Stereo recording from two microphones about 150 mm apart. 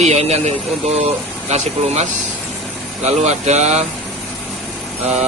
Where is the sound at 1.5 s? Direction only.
45° right (ahead or behind).